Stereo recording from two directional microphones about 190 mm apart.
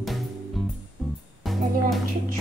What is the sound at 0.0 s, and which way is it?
Music, centre (ahead or behind).